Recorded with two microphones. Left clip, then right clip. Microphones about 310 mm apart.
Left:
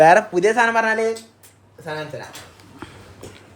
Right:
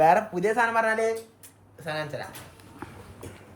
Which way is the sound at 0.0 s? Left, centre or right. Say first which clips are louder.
Left 8 dB; left.